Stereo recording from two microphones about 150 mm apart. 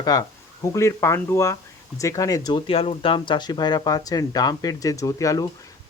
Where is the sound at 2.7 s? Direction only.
40° left (ahead or behind).